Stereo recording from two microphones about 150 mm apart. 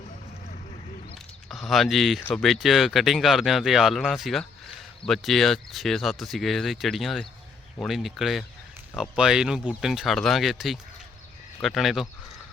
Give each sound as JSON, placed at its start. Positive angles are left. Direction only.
{"t": 1.5, "sound": "speech", "side_deg": 0}